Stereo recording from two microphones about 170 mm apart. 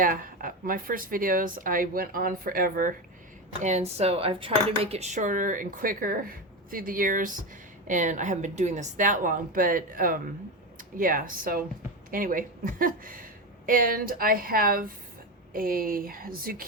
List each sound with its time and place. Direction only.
0.0 s speech: 55° right (ahead or behind)
3.6 s cutlery: 40° right (ahead or behind)
10.8 s speech: 55° right (ahead or behind)